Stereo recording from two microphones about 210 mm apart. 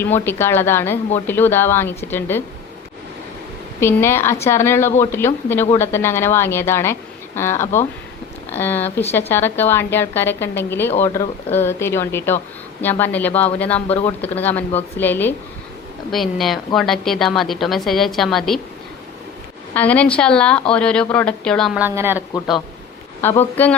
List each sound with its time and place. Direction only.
0.0 s a woman's voice: 10° left (ahead or behind)
3.8 s a woman's voice: 10° left (ahead or behind)
13.8 s speech: 30° left (ahead or behind)
14.2 s a woman's voice: 10° left (ahead or behind)
19.7 s a woman's voice: 5° left (ahead or behind)
21.8 s speech: 10° right (ahead or behind)
23.2 s a woman's voice: 10° left (ahead or behind)